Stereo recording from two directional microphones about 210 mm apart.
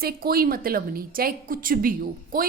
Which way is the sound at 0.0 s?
45° right (ahead or behind).